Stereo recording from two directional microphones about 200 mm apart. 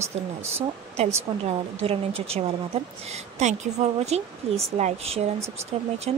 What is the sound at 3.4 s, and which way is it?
Speech, 35° right (ahead or behind).